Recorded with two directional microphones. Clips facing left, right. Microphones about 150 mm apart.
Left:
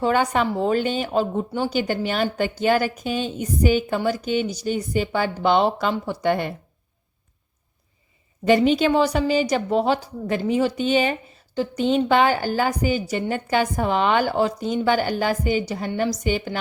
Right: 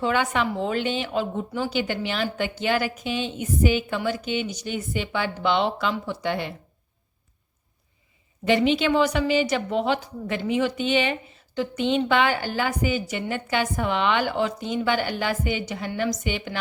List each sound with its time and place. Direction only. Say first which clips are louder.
0.0 s a woman's voice: left 3 dB; 40° left (ahead or behind)
8.4 s a woman's voice: left 3 dB; 40° left (ahead or behind)